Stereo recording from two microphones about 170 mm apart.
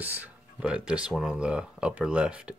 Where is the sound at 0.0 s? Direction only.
10° right (ahead or behind).